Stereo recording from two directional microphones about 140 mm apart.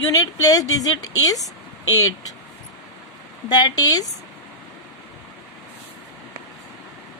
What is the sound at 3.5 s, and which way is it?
Speech, 30° left (ahead or behind).